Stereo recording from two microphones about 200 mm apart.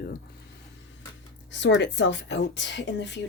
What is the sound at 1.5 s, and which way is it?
A woman's voice, 65° left (ahead or behind).